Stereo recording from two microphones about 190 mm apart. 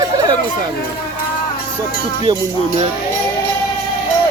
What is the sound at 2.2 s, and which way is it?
Cowbell, 20° right (ahead or behind).